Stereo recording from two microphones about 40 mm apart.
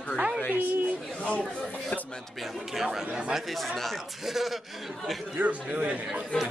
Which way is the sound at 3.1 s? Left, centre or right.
Right.